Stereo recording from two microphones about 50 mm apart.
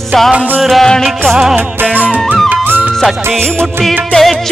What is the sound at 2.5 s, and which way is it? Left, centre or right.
Music, right.